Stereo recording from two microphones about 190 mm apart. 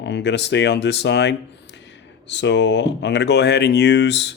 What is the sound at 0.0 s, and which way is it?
Speech, 65° left (ahead or behind).